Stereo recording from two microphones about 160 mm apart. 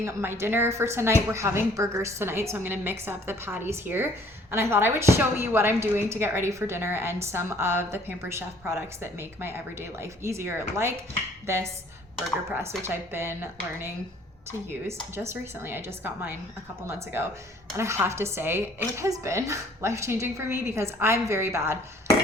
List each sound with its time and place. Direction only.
0.0 s a woman's voice: 15° right (ahead or behind)
12.8 s a woman's voice: 15° right (ahead or behind)
15.1 s a woman's voice: 15° right (ahead or behind)